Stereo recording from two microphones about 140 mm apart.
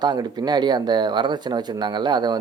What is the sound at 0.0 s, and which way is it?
Speech, 30° right (ahead or behind).